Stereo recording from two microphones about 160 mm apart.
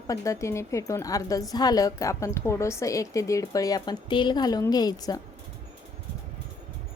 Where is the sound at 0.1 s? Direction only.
20° left (ahead or behind).